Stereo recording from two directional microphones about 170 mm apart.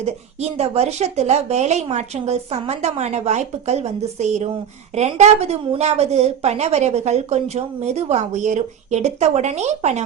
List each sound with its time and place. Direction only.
0.0 s a woman's voice: 40° right (ahead or behind)